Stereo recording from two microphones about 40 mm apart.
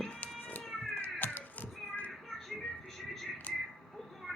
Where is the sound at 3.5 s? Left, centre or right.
Left.